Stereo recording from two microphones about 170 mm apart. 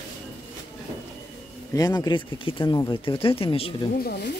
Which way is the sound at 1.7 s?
25° left (ahead or behind).